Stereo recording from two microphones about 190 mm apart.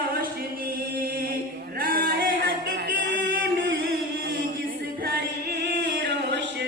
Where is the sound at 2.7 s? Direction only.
65° right (ahead or behind).